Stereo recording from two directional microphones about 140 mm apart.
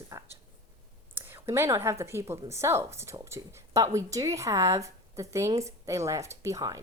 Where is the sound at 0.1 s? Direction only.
20° right (ahead or behind).